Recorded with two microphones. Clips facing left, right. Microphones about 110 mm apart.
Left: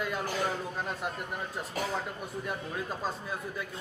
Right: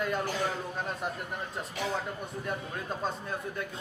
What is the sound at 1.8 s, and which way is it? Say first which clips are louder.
Speech: even; 45° left (ahead or behind).